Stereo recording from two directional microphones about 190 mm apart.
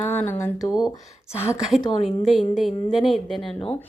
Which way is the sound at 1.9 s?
35° left (ahead or behind).